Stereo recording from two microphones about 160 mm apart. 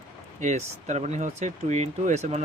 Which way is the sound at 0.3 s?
45° right (ahead or behind).